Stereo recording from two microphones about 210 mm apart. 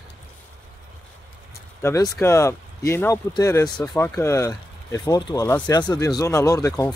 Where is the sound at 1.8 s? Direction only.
10° left (ahead or behind).